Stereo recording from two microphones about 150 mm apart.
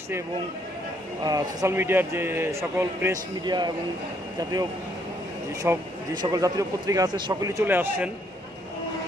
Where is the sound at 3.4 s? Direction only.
30° right (ahead or behind).